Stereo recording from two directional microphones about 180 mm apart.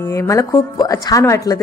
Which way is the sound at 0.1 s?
15° left (ahead or behind).